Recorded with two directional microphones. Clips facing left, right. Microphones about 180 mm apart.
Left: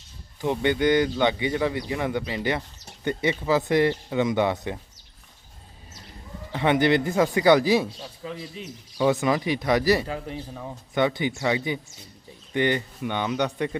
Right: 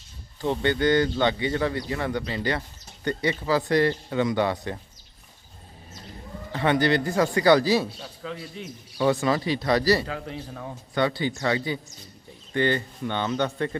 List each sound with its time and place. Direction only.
0.4 s a man's voice: 15° left (ahead or behind)
6.5 s a man's voice: 20° left (ahead or behind)